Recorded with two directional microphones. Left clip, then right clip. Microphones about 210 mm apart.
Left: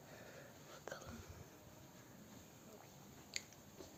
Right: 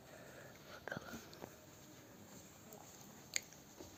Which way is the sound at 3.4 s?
5° right (ahead or behind).